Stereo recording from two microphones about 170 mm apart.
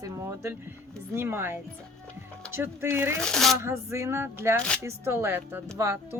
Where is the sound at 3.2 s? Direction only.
5° left (ahead or behind).